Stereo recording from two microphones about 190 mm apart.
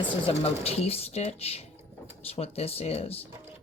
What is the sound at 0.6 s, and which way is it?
Speech, 30° left (ahead or behind).